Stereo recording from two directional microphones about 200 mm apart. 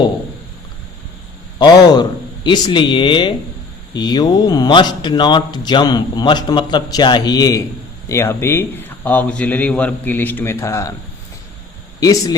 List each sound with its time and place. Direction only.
1.5 s a man's voice: 20° left (ahead or behind)
11.9 s speech: 15° left (ahead or behind)